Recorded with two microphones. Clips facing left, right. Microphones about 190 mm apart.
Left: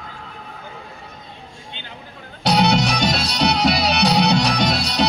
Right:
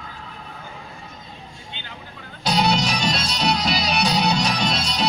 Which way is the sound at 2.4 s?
70° left (ahead or behind).